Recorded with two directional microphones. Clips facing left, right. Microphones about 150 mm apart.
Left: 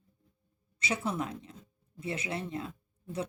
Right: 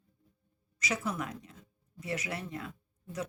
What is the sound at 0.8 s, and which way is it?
Speech, 30° left (ahead or behind).